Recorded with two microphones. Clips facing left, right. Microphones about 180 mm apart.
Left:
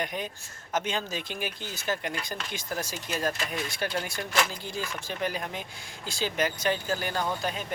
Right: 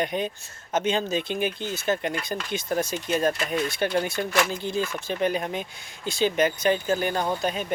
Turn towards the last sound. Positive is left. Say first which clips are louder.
# right 4 dB
turn(degrees=-20)  # may be behind; listen again after turning